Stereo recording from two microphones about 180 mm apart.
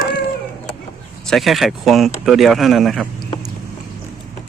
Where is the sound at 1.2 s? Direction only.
Centre (ahead or behind).